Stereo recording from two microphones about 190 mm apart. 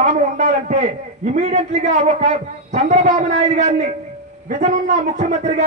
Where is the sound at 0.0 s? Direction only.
45° right (ahead or behind).